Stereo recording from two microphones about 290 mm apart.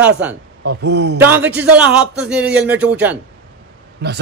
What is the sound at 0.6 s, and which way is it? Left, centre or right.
Speech, right.